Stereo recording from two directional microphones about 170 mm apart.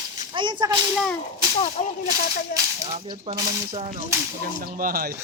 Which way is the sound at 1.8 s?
35° left (ahead or behind).